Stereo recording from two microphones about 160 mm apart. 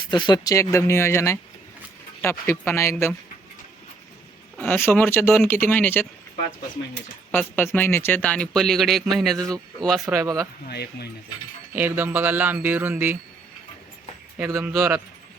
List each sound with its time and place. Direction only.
0.1 s speech: 30° left (ahead or behind); by 3.2 s 10° left (ahead or behind)
4.5 s speech: 10° left (ahead or behind)
7.3 s speech: 10° left (ahead or behind)
10.1 s speech: 20° right (ahead or behind)
10.7 s speech: 90° left
11.7 s speech: 10° right (ahead or behind)
14.3 s speech: 10° right (ahead or behind)